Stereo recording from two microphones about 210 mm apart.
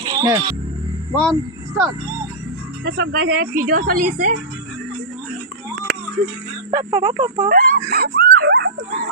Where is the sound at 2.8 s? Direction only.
45° right (ahead or behind).